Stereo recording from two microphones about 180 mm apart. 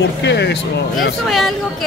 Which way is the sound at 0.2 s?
70° left (ahead or behind).